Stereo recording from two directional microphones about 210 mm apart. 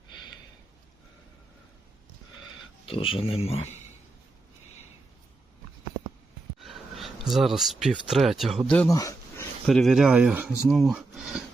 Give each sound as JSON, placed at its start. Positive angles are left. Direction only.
{"t": 2.8, "sound": "speech", "side_deg": 25}
{"t": 6.6, "sound": "speech", "side_deg": 0}
{"t": 9.0, "sound": "a sound", "side_deg": 15}
{"t": 9.6, "sound": "speech", "side_deg": 0}